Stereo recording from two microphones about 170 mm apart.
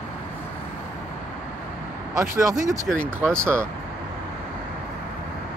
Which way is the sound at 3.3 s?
15° right (ahead or behind).